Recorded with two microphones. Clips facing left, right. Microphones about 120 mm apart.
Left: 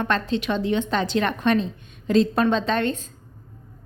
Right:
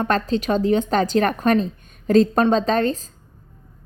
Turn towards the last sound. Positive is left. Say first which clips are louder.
# right 4 dB
turn(degrees=-35)  # may be behind; listen again after turning